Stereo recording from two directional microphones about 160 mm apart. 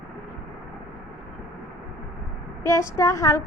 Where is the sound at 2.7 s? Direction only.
15° left (ahead or behind).